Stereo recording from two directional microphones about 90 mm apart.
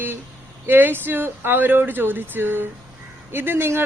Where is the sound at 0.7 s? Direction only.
20° right (ahead or behind).